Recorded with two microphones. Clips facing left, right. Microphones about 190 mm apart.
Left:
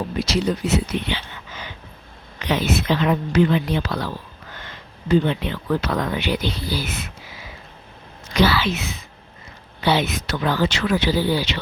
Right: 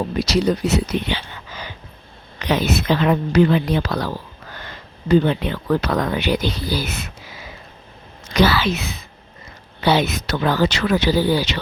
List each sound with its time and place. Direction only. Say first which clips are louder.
0.2 s speech: right 3 dB; 40° right (ahead or behind)
4.5 s a sound: right 3 dB; 40° right (ahead or behind)
5.9 s speech: right 3 dB; 45° right (ahead or behind)
8.3 s speech: right 2 dB; 40° right (ahead or behind)